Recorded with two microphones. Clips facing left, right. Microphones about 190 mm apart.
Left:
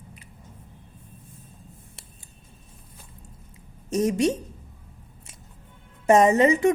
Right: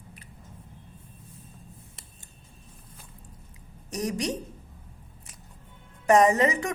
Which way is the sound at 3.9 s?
25° left (ahead or behind).